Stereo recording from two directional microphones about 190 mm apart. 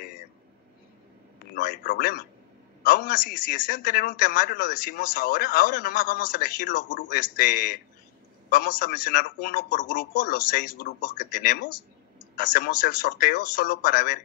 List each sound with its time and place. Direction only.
1.5 s a man's voice: 50° left (ahead or behind)